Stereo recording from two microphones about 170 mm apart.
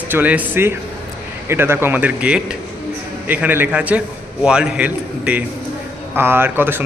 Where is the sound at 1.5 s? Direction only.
15° right (ahead or behind).